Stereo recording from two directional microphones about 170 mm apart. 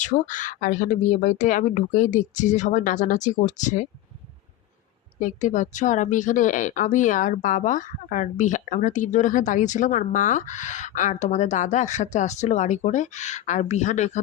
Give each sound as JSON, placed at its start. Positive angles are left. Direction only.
{"t": 0.0, "sound": "speech", "side_deg": 50}
{"t": 5.2, "sound": "speech", "side_deg": 45}